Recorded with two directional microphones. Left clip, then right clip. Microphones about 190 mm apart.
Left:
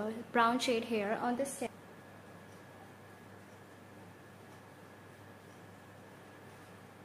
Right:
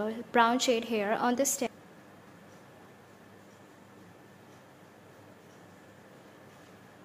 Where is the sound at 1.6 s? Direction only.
65° right (ahead or behind).